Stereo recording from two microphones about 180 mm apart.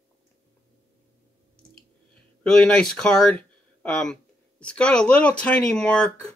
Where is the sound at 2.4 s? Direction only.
5° left (ahead or behind).